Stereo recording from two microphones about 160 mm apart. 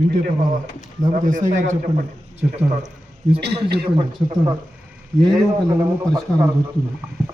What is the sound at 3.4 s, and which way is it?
Speech, 90° right.